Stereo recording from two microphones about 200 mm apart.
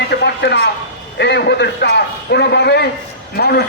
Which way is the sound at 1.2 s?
55° left (ahead or behind).